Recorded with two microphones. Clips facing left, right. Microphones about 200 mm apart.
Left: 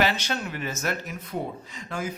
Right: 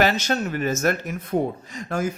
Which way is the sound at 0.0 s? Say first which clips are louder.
Right 5 dB; 45° right (ahead or behind).